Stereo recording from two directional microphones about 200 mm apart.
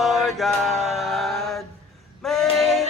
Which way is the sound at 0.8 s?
Centre (ahead or behind).